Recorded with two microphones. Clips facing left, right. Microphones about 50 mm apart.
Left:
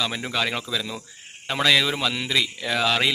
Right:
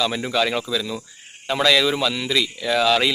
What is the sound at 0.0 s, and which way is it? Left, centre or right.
Speech, centre.